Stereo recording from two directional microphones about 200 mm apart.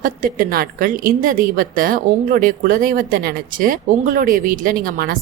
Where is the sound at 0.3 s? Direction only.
45° right (ahead or behind).